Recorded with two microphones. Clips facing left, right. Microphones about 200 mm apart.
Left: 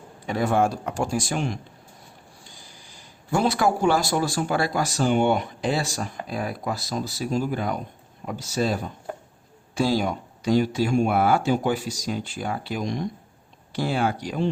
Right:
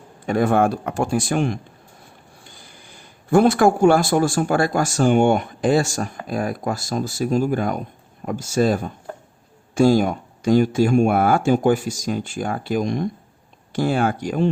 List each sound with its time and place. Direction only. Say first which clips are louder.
0.3 s speech: right 4 dB; 55° right (ahead or behind)